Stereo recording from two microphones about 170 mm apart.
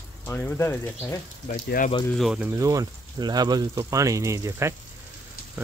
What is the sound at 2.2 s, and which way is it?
Speech, centre (ahead or behind).